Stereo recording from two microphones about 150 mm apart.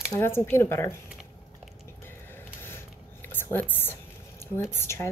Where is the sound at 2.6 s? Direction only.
15° left (ahead or behind).